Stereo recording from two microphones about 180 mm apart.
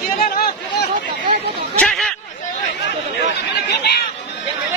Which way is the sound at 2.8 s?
70° left (ahead or behind).